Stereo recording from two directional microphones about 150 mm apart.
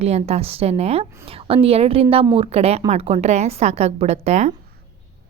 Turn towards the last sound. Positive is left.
turn(degrees=-50)  # may be behind; listen again after turning